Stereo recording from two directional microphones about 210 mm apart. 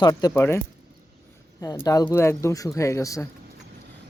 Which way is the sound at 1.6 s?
20° left (ahead or behind).